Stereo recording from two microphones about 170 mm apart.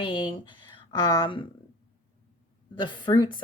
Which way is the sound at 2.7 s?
30° left (ahead or behind).